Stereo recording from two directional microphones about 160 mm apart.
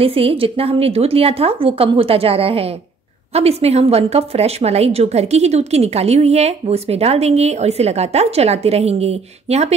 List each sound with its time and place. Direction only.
0.0 s a woman's voice: 35° right (ahead or behind)